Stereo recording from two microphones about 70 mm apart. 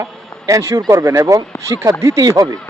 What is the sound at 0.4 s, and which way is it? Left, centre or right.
Speech, right.